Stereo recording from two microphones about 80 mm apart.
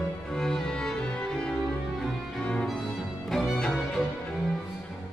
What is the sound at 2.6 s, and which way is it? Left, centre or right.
Music, centre.